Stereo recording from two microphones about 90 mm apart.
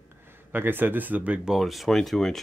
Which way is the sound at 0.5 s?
20° right (ahead or behind).